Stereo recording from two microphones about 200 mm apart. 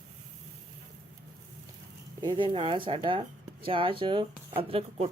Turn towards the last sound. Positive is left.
turn(degrees=-30)  # may be behind; listen again after turning